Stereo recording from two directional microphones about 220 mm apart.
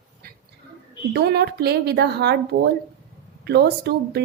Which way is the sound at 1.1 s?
45° right (ahead or behind).